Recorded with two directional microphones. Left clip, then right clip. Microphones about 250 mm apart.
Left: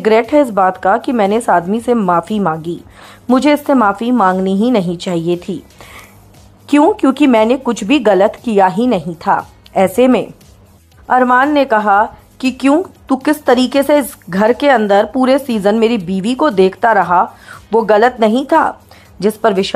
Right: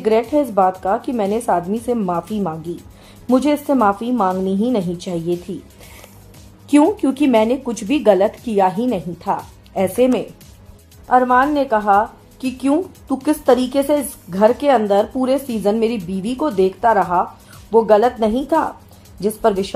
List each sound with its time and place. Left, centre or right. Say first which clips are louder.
0.0 s speech: left 6 dB; centre